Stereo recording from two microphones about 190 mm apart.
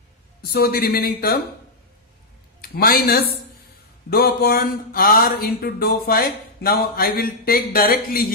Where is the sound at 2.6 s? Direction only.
50° left (ahead or behind).